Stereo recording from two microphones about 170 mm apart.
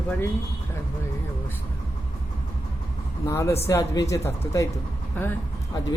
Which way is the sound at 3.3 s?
15° left (ahead or behind).